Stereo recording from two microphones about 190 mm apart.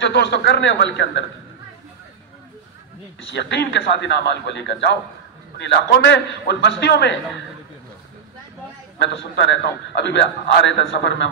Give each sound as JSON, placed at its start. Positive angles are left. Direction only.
{"t": 0.0, "sound": "a man's voice", "side_deg": 65}
{"t": 3.2, "sound": "a man's voice", "side_deg": 70}
{"t": 9.0, "sound": "a man's voice", "side_deg": 65}